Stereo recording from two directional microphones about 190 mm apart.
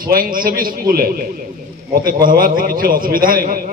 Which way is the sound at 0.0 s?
50° right (ahead or behind).